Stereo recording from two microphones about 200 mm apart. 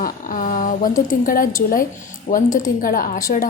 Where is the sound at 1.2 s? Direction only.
45° left (ahead or behind).